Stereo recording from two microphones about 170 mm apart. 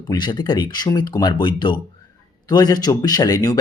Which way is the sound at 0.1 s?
25° left (ahead or behind).